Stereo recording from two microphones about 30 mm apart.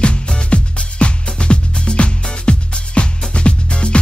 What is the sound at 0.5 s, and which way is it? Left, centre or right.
Music, left.